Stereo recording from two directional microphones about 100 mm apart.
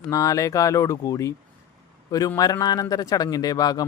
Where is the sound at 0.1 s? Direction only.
35° left (ahead or behind).